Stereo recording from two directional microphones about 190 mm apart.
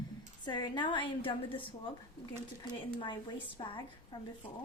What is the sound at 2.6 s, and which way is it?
A woman's voice, 25° left (ahead or behind).